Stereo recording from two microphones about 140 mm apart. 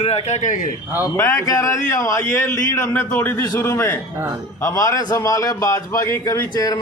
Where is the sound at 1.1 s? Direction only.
20° left (ahead or behind).